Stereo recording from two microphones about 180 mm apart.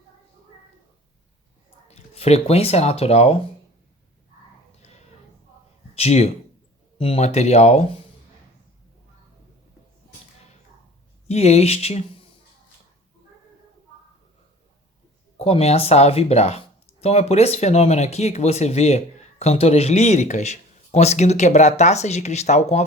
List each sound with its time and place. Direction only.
1.9 s speech: 35° left (ahead or behind)
5.9 s speech: 35° left (ahead or behind)
11.3 s speech: 35° left (ahead or behind)
15.4 s speech: 35° left (ahead or behind)